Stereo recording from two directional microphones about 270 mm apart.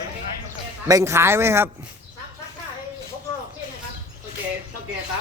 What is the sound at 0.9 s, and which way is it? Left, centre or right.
Speech, centre.